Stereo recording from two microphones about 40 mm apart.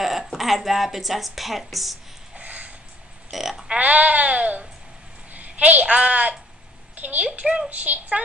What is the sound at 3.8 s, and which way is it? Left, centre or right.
A child's voice, right.